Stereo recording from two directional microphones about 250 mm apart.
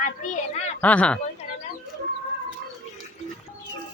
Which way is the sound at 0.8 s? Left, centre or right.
Centre.